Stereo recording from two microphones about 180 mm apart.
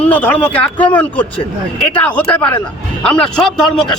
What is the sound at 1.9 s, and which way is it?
A man's voice, 5° left (ahead or behind).